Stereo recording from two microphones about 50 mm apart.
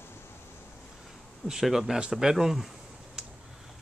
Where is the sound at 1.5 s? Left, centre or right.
Centre.